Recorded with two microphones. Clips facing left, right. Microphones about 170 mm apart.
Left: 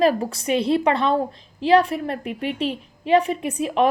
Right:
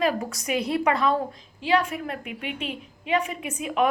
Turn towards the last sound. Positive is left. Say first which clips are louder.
# left 5 dB
turn(degrees=35)  # may be behind; listen again after turning